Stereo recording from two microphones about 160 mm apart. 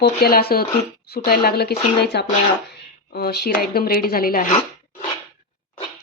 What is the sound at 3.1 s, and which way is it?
Speech, 80° left.